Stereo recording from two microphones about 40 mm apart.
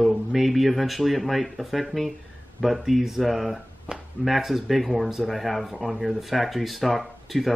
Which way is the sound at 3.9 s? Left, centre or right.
Right.